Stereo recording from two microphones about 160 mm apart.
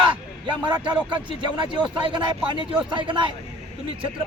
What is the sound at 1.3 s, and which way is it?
Speech, 30° right (ahead or behind).